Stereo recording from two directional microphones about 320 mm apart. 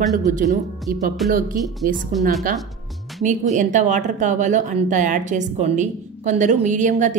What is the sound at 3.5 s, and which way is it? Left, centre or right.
Speech, right.